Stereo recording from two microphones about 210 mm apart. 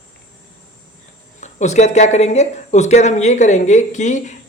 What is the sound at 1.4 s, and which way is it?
Speech, 35° left (ahead or behind).